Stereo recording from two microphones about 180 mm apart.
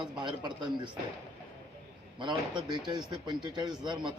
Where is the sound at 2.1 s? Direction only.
25° right (ahead or behind).